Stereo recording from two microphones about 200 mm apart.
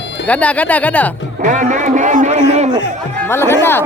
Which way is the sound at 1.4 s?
40° right (ahead or behind).